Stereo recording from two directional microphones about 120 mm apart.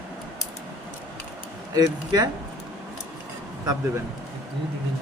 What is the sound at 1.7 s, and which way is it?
Speech, 30° right (ahead or behind).